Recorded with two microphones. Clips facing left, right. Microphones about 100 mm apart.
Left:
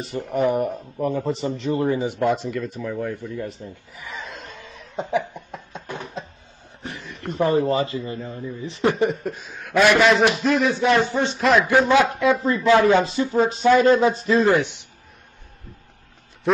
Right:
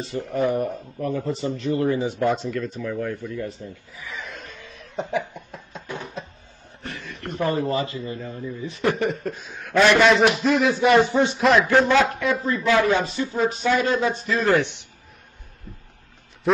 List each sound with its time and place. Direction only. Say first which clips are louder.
0.0 s a man's voice: left 2 dB; 15° left (ahead or behind)
2.2 s a man's voice: left 2 dB; 5° left (ahead or behind); by 3.5 s 20° left (ahead or behind)
4.0 s chuckle: left 1 dB; 20° left (ahead or behind)
6.8 s a man's voice: even; 15° left (ahead or behind)
9.1 s a man's voice: left 1 dB; 5° left (ahead or behind)
12.4 s a man's voice: left 2 dB; 30° left (ahead or behind)
13.0 s a sound: left 3 dB; 30° left (ahead or behind)
14.4 s speech: even; 15° left (ahead or behind)
16.5 s a man's voice: even; centre (ahead or behind)